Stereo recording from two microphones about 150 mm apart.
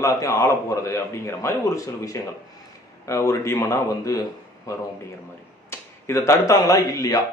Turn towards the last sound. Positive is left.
turn(degrees=25)  # may be behind; listen again after turning